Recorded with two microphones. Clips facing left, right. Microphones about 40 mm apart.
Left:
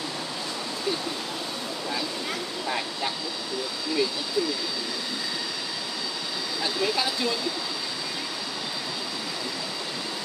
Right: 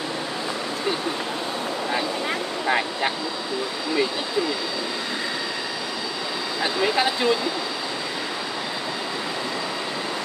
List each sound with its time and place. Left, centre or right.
2.6 s speech: right
6.6 s speech: right